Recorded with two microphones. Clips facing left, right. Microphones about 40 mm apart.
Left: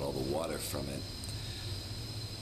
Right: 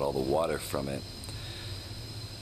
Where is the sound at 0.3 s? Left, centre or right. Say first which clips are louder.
Right 7 dB; right.